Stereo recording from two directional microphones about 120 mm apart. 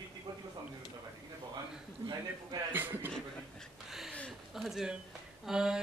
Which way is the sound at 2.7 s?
15° right (ahead or behind).